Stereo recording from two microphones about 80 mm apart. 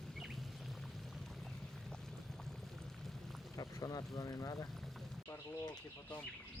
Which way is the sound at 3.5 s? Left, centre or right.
Left.